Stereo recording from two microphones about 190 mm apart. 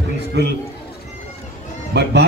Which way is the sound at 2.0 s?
65° right (ahead or behind).